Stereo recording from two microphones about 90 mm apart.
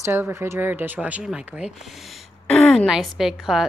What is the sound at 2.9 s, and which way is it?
Speech, 5° right (ahead or behind).